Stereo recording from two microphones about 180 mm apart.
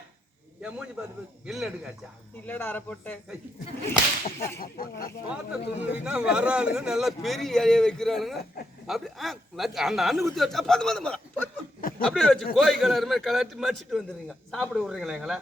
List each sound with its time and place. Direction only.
1.5 s a man's voice: centre (ahead or behind)
2.5 s speech: 10° left (ahead or behind)
4.6 s speech: 55° left (ahead or behind)
5.3 s a man's voice: 10° right (ahead or behind)
11.8 s a sound: 50° left (ahead or behind)
12.1 s a man's voice: 5° left (ahead or behind)